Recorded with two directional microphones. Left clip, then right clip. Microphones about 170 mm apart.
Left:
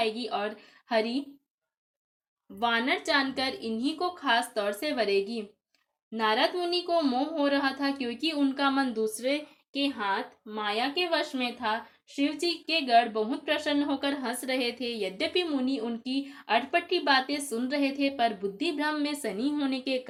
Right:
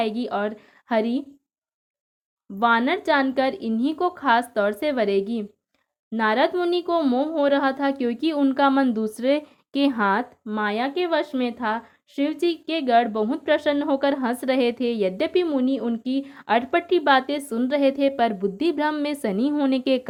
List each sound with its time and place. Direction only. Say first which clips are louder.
0.0 s speech: right 5 dB; 55° right (ahead or behind)
2.6 s speech: right 7 dB; 50° right (ahead or behind)